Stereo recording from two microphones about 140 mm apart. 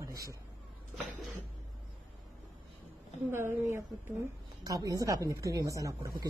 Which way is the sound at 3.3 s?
15° right (ahead or behind).